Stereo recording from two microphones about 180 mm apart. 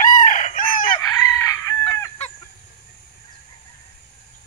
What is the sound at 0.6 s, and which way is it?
Chicken, 15° left (ahead or behind).